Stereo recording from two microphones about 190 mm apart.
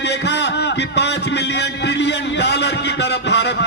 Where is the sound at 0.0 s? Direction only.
65° left (ahead or behind).